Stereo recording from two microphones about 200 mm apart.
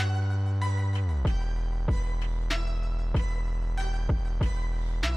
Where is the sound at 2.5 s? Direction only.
Centre (ahead or behind).